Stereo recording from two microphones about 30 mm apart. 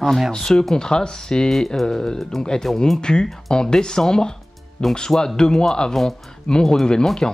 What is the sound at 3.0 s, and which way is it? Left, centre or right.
Speech, left.